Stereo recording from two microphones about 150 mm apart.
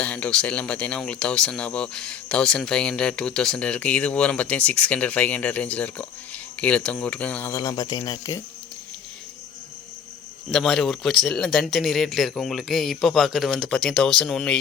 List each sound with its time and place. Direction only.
0.0 s speech: 10° left (ahead or behind)
7.5 s speech: 25° left (ahead or behind)
10.5 s speech: 5° left (ahead or behind)